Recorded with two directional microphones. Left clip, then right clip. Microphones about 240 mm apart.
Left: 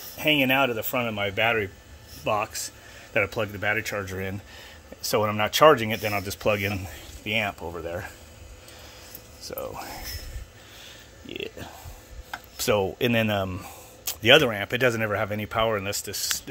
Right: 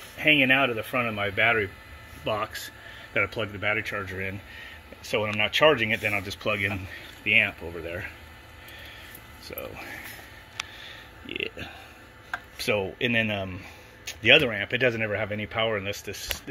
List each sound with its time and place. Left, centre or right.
0.2 s speech: centre
9.5 s speech: centre
11.2 s speech: centre
12.5 s speech: centre